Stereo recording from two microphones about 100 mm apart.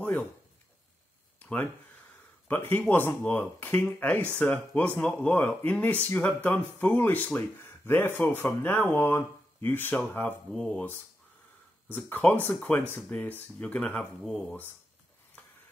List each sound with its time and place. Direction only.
1.4 s a sound: 15° left (ahead or behind)
2.4 s speech: 20° left (ahead or behind)
11.9 s speech: 20° left (ahead or behind)
14.2 s speech: 5° left (ahead or behind)